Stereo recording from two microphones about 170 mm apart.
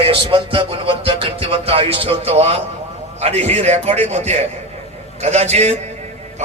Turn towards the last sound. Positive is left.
turn(degrees=-40)  # may be behind; listen again after turning